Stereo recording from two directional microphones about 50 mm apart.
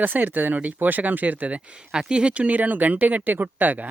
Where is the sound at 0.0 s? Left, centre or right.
Right.